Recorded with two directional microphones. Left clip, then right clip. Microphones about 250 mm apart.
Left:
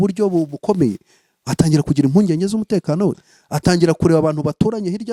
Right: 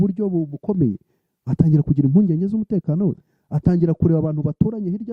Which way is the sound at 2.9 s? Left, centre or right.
Centre.